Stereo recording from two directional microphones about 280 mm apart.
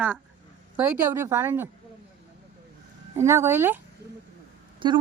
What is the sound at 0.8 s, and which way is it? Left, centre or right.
Speech, centre.